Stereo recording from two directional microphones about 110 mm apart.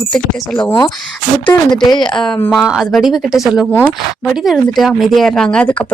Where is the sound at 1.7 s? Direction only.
Centre (ahead or behind).